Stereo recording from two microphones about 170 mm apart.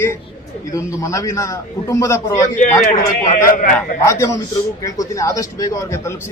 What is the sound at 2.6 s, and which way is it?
A man's voice, 50° left (ahead or behind).